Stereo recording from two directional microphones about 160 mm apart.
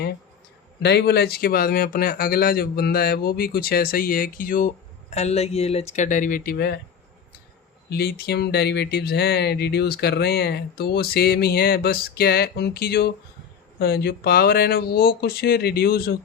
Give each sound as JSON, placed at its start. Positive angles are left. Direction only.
{"t": 0.8, "sound": "speech", "side_deg": 90}
{"t": 5.1, "sound": "speech", "side_deg": 40}
{"t": 7.9, "sound": "speech", "side_deg": 80}